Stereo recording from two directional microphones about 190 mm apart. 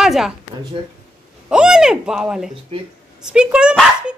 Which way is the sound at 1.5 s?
5° right (ahead or behind).